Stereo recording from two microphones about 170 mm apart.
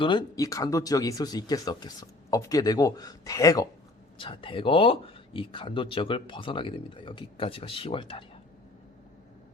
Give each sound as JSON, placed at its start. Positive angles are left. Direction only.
{"t": 0.0, "sound": "speech", "side_deg": 25}